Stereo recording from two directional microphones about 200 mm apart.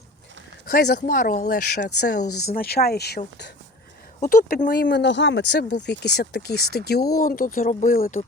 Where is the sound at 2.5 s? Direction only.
50° left (ahead or behind).